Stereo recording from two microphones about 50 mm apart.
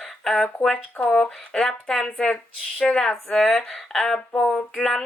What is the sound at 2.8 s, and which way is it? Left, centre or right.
Speech, centre.